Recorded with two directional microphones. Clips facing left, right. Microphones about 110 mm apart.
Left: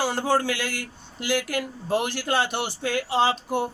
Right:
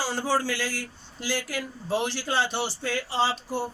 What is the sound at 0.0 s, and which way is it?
Speech, 55° left (ahead or behind).